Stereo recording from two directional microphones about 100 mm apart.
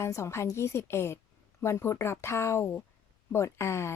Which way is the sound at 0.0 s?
30° left (ahead or behind).